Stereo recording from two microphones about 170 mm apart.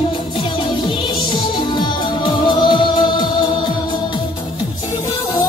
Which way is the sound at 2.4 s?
30° left (ahead or behind).